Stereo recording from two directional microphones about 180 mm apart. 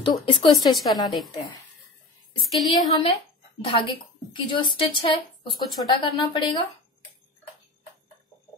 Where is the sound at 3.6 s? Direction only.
30° left (ahead or behind).